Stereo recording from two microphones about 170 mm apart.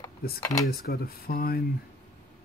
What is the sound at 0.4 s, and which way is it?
Speech, 20° left (ahead or behind).